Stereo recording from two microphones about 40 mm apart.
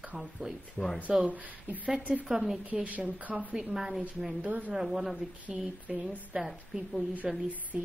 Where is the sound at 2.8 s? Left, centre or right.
Right.